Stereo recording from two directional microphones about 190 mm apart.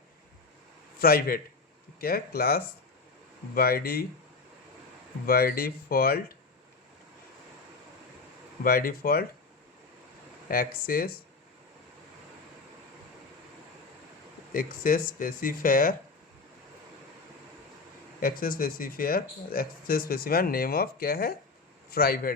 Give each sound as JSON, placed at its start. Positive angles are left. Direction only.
{"t": 0.9, "sound": "speech", "side_deg": 50}
{"t": 5.2, "sound": "speech", "side_deg": 50}
{"t": 8.6, "sound": "speech", "side_deg": 50}
{"t": 10.5, "sound": "speech", "side_deg": 50}
{"t": 14.5, "sound": "speech", "side_deg": 50}
{"t": 18.2, "sound": "speech", "side_deg": 50}